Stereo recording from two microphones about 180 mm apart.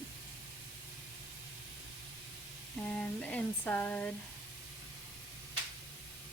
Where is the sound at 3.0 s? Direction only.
10° left (ahead or behind).